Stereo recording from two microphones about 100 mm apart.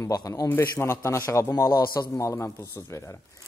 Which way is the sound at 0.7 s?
25° left (ahead or behind).